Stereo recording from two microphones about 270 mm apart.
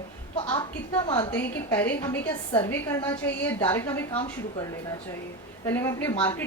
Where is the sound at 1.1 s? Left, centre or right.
Centre.